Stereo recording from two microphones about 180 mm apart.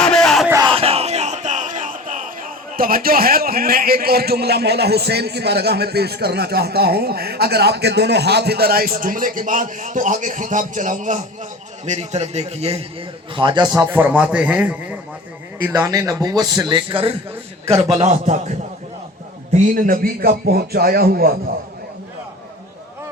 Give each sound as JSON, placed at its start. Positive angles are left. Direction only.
{"t": 0.0, "sound": "crowd", "side_deg": 5}
{"t": 0.6, "sound": "crowd", "side_deg": -30}
{"t": 11.9, "sound": "a man's voice", "side_deg": -40}
{"t": 19.5, "sound": "a man's voice", "side_deg": -50}